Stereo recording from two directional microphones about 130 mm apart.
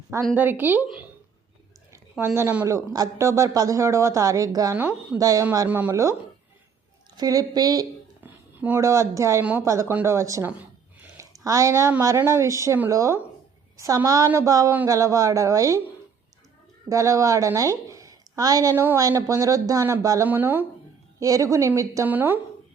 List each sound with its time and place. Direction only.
0.3 s speech: 15° right (ahead or behind)
1.9 s speech: 20° right (ahead or behind)
5.6 s speech: 15° right (ahead or behind)
5.9 s speech: 25° right (ahead or behind)
7.2 s speech: 30° right (ahead or behind)
8.2 s speech: 15° right (ahead or behind)
9.4 s speech: 10° right (ahead or behind)
16.9 s a woman's voice: 25° right (ahead or behind)
20.2 s speech: 15° right (ahead or behind)
21.2 s speech: 25° right (ahead or behind)